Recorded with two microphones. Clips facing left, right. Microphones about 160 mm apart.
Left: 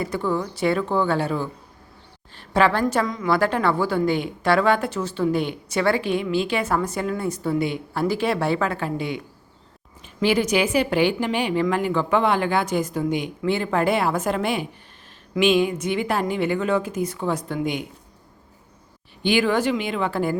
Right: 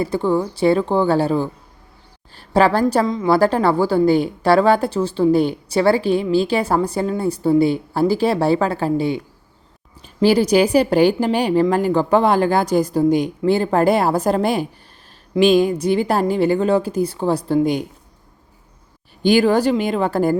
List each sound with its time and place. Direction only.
0.0 s a woman's voice: 30° right (ahead or behind)
19.2 s a woman's voice: 40° right (ahead or behind)